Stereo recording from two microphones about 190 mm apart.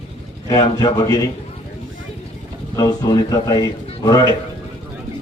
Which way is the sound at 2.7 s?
20° left (ahead or behind).